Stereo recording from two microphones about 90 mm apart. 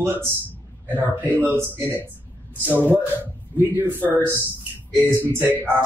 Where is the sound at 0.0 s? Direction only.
30° right (ahead or behind).